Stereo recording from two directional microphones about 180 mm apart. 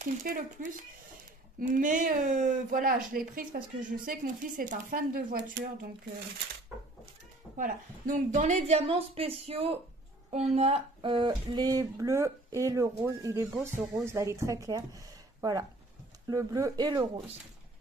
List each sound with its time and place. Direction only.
0.0 s speech: 45° right (ahead or behind); by 5.7 s 65° right (ahead or behind)
7.5 s a woman's voice: 45° right (ahead or behind); by 17.1 s 25° right (ahead or behind)